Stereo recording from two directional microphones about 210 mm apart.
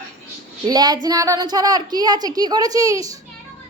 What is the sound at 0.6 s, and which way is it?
A woman's voice, 20° right (ahead or behind).